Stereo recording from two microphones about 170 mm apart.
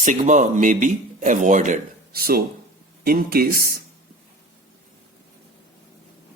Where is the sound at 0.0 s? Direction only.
50° right (ahead or behind).